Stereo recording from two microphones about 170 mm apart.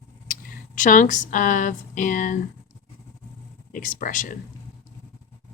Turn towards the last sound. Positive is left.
turn(degrees=50)  # may be behind; listen again after turning